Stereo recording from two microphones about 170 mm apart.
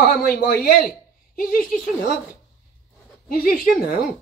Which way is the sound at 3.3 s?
55° left (ahead or behind).